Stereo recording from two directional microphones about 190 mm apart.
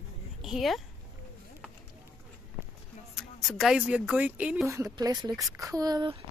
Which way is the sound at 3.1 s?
Centre (ahead or behind).